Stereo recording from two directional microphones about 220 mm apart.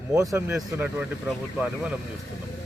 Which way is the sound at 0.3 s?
10° right (ahead or behind).